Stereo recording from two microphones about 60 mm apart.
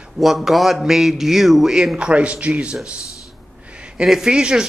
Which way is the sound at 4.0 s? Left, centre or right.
Centre.